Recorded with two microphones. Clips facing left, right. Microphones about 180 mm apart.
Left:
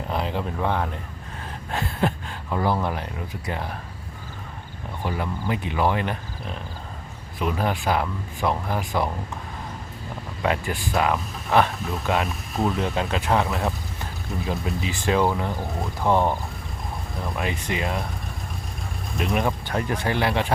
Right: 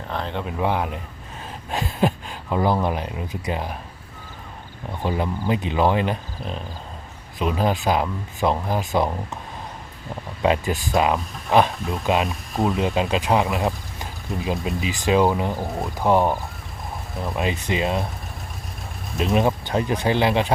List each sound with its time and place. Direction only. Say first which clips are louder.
0.1 s speech: even; 5° left (ahead or behind)
0.6 s speech: right 4 dB; 15° right (ahead or behind)
5.0 s speech: right 4 dB; 20° right (ahead or behind)
10.4 s speech: right 4 dB; 20° right (ahead or behind)
19.1 s speech: right 4 dB; 20° right (ahead or behind)